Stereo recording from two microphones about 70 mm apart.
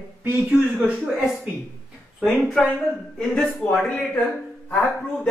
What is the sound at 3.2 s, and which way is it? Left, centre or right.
Speech, centre.